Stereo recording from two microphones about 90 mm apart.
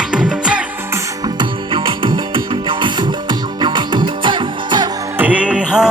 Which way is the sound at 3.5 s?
60° right (ahead or behind).